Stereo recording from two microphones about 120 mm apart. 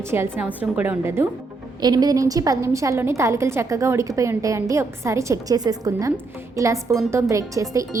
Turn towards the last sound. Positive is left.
turn(degrees=-25)  # may be behind; listen again after turning